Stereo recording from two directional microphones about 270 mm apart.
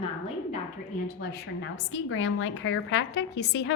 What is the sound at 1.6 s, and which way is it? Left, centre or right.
A woman's voice, left.